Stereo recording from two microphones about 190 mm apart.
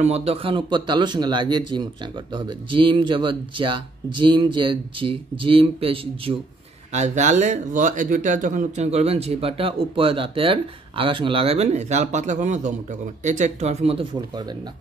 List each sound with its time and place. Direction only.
0.0 s speech: 35° right (ahead or behind)